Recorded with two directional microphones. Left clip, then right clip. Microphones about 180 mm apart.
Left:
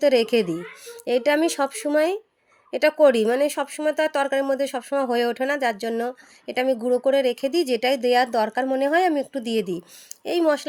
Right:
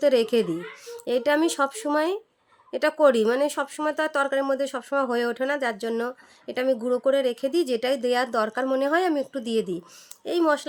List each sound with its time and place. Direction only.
0.0 s speech: 15° left (ahead or behind)